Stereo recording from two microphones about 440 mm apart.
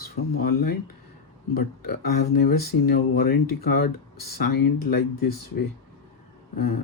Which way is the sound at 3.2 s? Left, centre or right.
Left.